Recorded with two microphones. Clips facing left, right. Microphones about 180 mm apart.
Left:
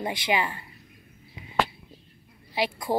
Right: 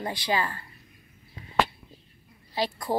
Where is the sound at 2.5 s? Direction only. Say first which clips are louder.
Left 1 dB; 10° left (ahead or behind).